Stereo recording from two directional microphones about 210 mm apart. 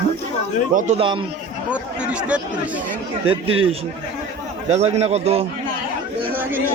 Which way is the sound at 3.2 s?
25° right (ahead or behind).